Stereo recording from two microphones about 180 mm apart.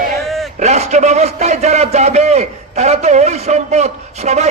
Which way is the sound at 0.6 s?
40° right (ahead or behind).